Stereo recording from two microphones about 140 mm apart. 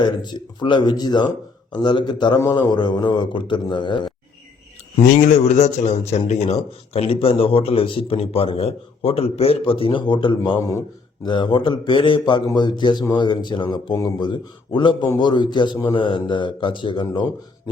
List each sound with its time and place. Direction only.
0.0 s speech: 30° left (ahead or behind)
5.0 s a man's voice: 70° left (ahead or behind); by 10.6 s 35° left (ahead or behind)
10.6 s speech: 20° left (ahead or behind)